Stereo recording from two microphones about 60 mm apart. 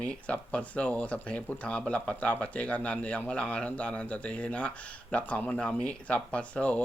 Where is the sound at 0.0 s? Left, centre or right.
Centre.